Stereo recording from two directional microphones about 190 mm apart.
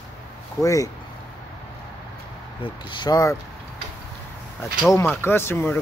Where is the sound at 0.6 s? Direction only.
15° left (ahead or behind).